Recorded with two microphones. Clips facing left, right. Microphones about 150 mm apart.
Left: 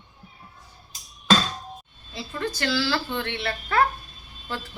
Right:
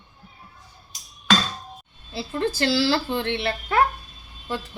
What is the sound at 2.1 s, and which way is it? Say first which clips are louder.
A woman's voice: right 5 dB; 30° right (ahead or behind).